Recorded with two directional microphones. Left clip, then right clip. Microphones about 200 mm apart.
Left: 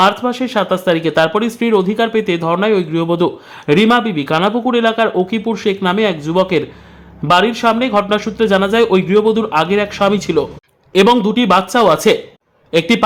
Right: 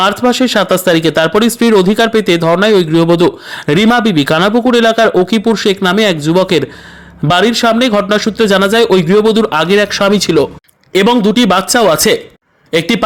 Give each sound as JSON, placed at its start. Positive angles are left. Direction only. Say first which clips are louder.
{"t": 0.0, "sound": "speech", "louder": "right 3 dB", "side_deg": -30}